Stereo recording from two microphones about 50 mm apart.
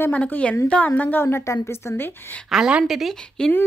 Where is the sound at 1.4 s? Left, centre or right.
Left.